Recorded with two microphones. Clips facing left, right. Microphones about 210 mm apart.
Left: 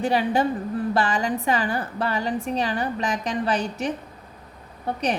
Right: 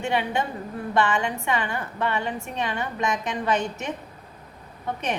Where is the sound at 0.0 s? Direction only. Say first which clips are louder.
Left 4 dB; 35° left (ahead or behind).